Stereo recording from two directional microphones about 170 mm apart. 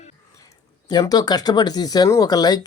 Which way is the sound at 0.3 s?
20° left (ahead or behind).